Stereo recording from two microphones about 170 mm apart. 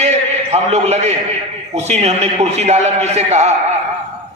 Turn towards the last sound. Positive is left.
turn(degrees=-40)  # may be behind; listen again after turning